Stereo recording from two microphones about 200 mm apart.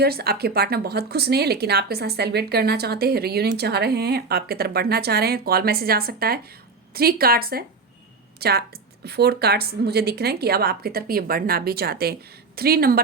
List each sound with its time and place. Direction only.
0.0 s speech: 50° right (ahead or behind)